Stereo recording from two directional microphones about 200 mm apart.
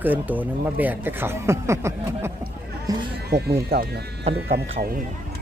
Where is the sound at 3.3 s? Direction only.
50° right (ahead or behind).